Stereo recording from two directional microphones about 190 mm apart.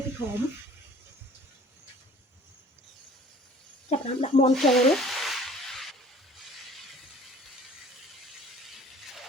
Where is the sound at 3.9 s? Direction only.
35° left (ahead or behind).